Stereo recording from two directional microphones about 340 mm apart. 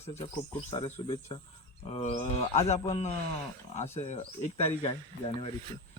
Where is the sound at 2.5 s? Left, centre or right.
Centre.